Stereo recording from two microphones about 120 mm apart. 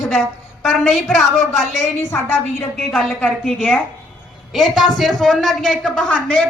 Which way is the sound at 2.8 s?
5° left (ahead or behind).